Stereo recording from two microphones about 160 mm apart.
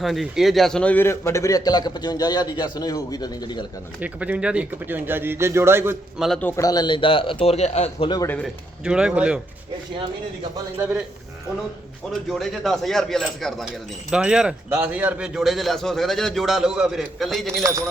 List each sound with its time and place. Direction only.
0.0 s a man's voice: centre (ahead or behind); by 3.6 s 25° left (ahead or behind)
4.0 s speech: 10° right (ahead or behind)
6.1 s a man's voice: centre (ahead or behind)
6.6 s a man's voice: 25° left (ahead or behind); by 8.1 s 40° left (ahead or behind)
8.8 s a man's voice: 5° right (ahead or behind)
12.1 s a man's voice: centre (ahead or behind)